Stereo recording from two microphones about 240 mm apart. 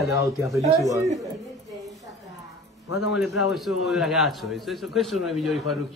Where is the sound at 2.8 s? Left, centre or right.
Left.